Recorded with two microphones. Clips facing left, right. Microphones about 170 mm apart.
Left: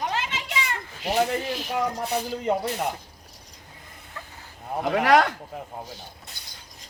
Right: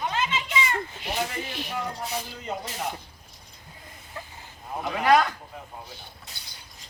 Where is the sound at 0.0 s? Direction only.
70° left (ahead or behind).